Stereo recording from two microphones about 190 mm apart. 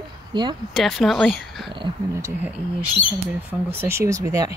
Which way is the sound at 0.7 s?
Centre (ahead or behind).